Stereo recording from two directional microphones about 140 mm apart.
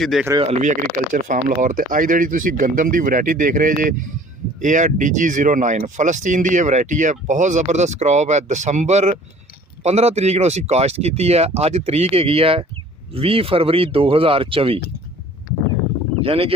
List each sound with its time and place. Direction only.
0.0 s speech: centre (ahead or behind)
0.4 s speech: 65° right (ahead or behind); by 14.8 s 40° right (ahead or behind)
16.2 s speech: 40° right (ahead or behind)